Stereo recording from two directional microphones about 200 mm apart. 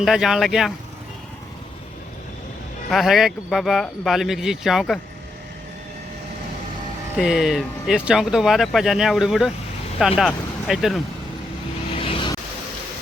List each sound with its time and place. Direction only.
0.0 s speech: centre (ahead or behind)
2.9 s speech: centre (ahead or behind)
7.2 s speech: centre (ahead or behind)
11.9 s vehicle: 25° left (ahead or behind)